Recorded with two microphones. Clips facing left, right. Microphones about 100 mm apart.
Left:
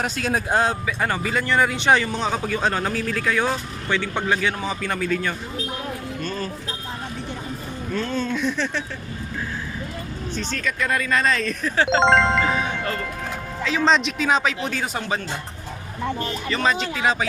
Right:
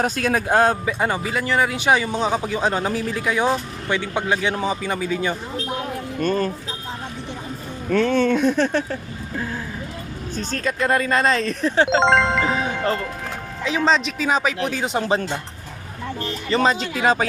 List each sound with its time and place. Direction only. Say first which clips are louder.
0.0 s speech: right 3 dB; 50° right (ahead or behind)
0.9 s speech: right 1 dB; 15° right (ahead or behind)
6.1 s speech: right 11 dB; 50° right (ahead or behind)
7.9 s speech: right 8 dB; 70° right (ahead or behind)
8.4 s speech: right 6 dB; 50° right (ahead or behind)
10.3 s speech: right 3 dB; 40° right (ahead or behind)
11.9 s speech: even; centre (ahead or behind)
12.4 s speech: right 1 dB; 30° right (ahead or behind)
13.8 s speech: left 1 dB; centre (ahead or behind)
14.9 s speech: right 6 dB; 30° right (ahead or behind)
16.5 s speech: right 4 dB; 30° right (ahead or behind)